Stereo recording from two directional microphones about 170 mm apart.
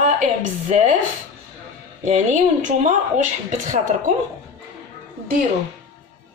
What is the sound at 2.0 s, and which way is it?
A woman's voice, 45° right (ahead or behind).